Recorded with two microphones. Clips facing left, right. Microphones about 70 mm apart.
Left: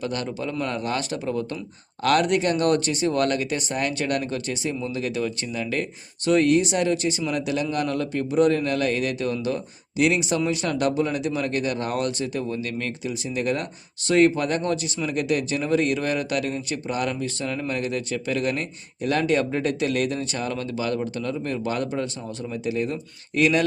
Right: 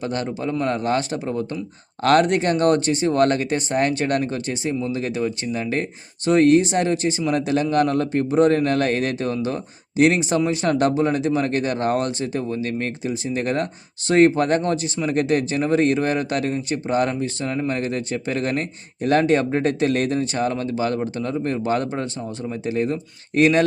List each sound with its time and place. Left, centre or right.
0.0 s speech: right